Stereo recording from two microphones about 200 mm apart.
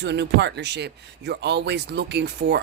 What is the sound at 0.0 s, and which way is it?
Speech, 60° right (ahead or behind).